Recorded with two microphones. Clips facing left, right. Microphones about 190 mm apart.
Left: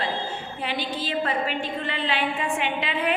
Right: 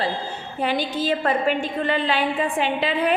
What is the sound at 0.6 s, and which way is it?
A woman's voice, 45° right (ahead or behind).